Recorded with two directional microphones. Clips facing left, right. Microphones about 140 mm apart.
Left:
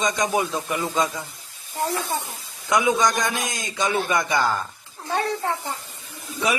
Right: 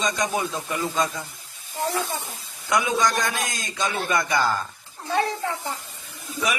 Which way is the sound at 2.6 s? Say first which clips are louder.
Left 2 dB; 20° left (ahead or behind).